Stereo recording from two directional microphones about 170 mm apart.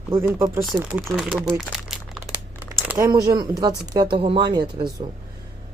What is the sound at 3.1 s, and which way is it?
Speech, 25° right (ahead or behind).